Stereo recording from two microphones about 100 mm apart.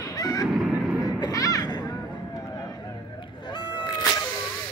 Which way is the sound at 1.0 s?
40° left (ahead or behind).